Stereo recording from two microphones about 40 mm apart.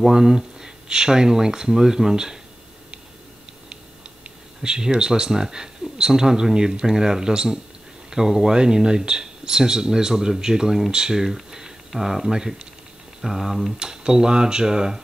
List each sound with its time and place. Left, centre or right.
0.1 s speech: centre
4.6 s speech: centre
13.7 s speech: centre